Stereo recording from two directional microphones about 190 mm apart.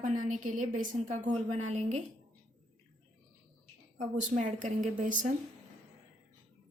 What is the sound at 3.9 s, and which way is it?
A woman's voice, 40° right (ahead or behind).